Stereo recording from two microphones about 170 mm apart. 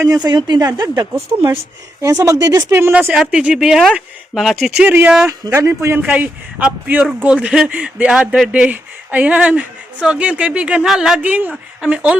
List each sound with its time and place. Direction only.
0.0 s speech: 20° right (ahead or behind)